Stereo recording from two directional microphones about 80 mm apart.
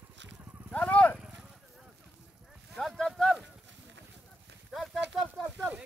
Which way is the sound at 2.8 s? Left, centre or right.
Centre.